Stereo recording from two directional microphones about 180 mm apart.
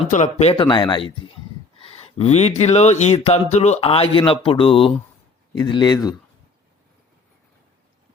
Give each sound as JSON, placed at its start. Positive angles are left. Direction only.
{"t": 0.1, "sound": "speech", "side_deg": 40}
{"t": 1.8, "sound": "a sound", "side_deg": 35}
{"t": 2.6, "sound": "speech", "side_deg": 40}